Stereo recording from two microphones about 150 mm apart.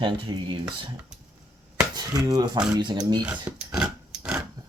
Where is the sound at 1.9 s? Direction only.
25° right (ahead or behind).